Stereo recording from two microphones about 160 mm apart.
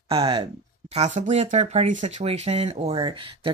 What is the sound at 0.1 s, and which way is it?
Speech, 35° right (ahead or behind).